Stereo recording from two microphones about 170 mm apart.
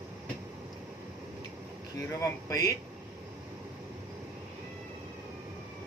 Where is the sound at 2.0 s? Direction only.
20° left (ahead or behind).